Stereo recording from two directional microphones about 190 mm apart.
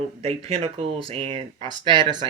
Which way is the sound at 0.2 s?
30° right (ahead or behind).